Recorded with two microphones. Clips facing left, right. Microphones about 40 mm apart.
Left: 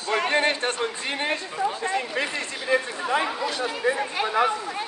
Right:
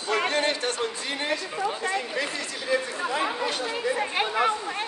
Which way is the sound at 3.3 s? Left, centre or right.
Right.